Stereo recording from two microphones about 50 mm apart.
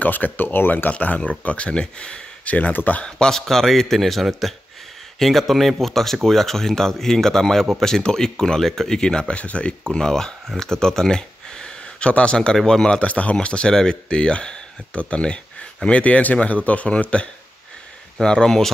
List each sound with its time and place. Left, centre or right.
0.0 s speech: left
1.0 s speech: left
3.0 s a man's voice: centre
9.3 s speech: left
10.6 s a sound: centre
12.1 s speech: left
13.0 s speech: left; by 18.7 s centre